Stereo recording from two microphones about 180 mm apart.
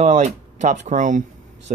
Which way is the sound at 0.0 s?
40° right (ahead or behind).